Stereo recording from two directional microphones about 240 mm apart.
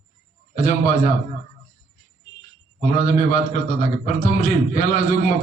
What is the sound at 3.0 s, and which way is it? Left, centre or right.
A man's voice, left.